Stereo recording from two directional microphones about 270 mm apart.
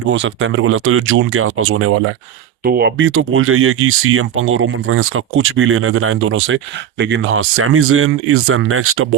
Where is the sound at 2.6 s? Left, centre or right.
Right.